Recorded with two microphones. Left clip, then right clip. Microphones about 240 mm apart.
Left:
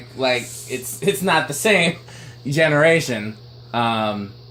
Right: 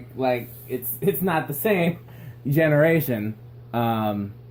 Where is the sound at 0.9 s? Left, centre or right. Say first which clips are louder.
Left 5 dB; centre.